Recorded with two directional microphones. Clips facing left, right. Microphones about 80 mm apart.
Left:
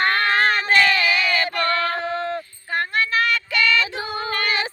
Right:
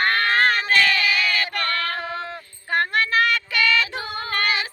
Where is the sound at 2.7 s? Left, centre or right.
Right.